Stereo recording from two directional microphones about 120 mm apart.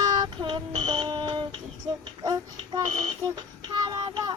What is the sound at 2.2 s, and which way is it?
Child singing, 35° right (ahead or behind).